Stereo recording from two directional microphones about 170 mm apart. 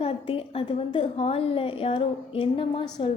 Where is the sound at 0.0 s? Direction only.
35° left (ahead or behind).